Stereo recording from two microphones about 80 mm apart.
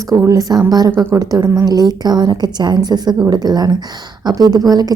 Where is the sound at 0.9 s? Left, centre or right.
Right.